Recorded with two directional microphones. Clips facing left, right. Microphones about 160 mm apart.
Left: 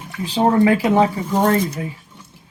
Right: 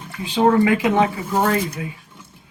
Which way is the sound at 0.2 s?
35° left (ahead or behind).